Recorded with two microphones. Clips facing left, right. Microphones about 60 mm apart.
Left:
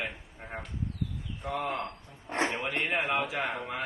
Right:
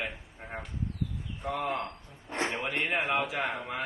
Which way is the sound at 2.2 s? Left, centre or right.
Left.